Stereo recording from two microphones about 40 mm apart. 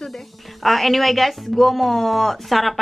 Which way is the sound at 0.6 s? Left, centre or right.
Centre.